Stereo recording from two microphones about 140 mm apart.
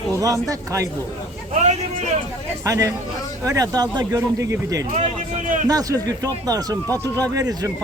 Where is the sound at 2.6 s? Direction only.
25° right (ahead or behind).